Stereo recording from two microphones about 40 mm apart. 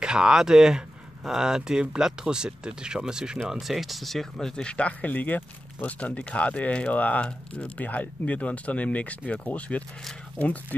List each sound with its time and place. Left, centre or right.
0.0 s speech: right
3.4 s speech: centre
4.7 s speech: left
5.1 s speech: left
5.8 s speech: left
6.9 s speech: left
7.8 s speech: left